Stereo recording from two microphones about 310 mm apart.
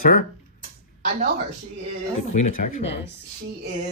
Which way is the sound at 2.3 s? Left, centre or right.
Left.